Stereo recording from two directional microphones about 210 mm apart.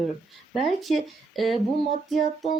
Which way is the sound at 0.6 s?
Centre (ahead or behind).